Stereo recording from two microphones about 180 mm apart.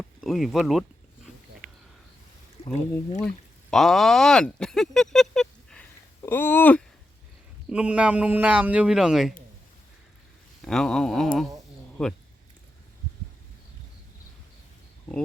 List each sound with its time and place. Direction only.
0.2 s a sound: centre (ahead or behind)
2.6 s speech: 40° left (ahead or behind)
3.2 s a sound: centre (ahead or behind)
6.2 s speech: 10° left (ahead or behind)
7.7 s speech: 5° right (ahead or behind)
10.6 s speech: 5° left (ahead or behind)